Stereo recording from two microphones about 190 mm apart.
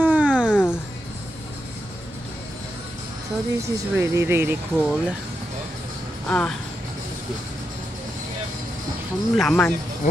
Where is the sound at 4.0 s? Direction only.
15° right (ahead or behind).